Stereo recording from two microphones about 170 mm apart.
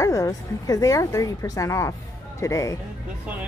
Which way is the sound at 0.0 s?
20° left (ahead or behind).